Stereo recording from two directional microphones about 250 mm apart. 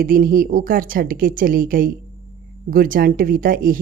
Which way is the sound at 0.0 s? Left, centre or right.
Right.